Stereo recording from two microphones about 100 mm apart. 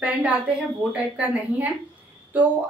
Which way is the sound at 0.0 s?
15° right (ahead or behind).